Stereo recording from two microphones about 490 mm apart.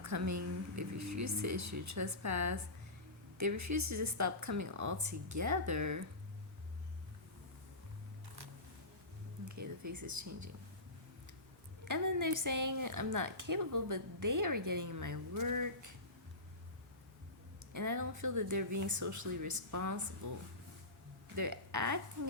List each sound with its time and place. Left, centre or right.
0.0 s a woman's voice: right
9.6 s speech: right
11.9 s a woman's voice: right
17.7 s a woman's voice: right
21.3 s speech: right